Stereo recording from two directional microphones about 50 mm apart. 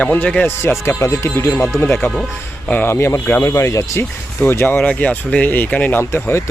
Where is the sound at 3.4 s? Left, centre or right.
Left.